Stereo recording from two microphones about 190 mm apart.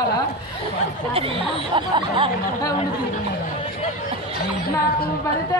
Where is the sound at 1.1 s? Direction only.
30° right (ahead or behind).